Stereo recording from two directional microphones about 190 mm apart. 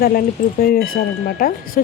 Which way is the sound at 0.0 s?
55° left (ahead or behind).